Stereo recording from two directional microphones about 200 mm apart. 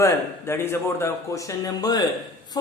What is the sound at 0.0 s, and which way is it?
Speech, 15° left (ahead or behind).